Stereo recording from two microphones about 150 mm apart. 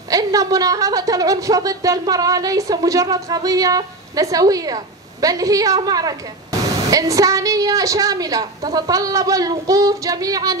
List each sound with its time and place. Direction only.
0.1 s a woman's voice: 25° right (ahead or behind)